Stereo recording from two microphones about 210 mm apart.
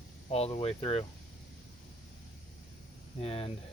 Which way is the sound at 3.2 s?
25° left (ahead or behind).